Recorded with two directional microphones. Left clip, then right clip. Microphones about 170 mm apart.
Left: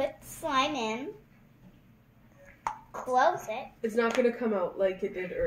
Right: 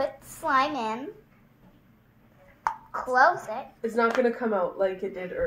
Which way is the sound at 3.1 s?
Centre (ahead or behind).